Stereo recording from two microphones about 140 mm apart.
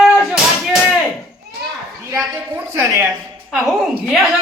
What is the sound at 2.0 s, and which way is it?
A woman's voice, 20° right (ahead or behind).